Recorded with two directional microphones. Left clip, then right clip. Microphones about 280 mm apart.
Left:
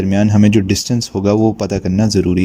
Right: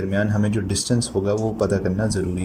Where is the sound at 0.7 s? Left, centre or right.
Left.